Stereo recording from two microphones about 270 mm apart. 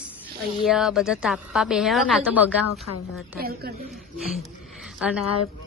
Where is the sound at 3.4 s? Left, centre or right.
Right.